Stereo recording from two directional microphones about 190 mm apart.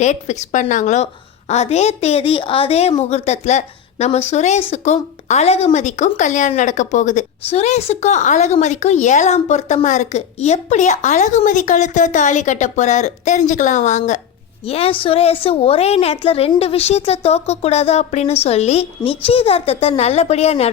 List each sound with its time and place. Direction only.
0.0 s speech: 40° left (ahead or behind)